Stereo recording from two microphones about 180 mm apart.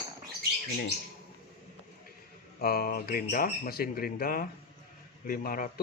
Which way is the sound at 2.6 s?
55° left (ahead or behind).